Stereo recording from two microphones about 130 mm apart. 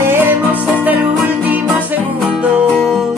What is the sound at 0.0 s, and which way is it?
Music, 15° right (ahead or behind).